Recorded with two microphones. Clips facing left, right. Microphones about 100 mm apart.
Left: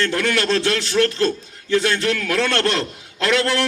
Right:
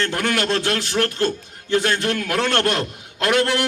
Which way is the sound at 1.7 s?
30° right (ahead or behind).